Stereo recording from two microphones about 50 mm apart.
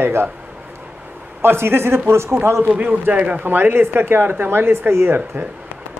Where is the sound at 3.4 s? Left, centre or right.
Right.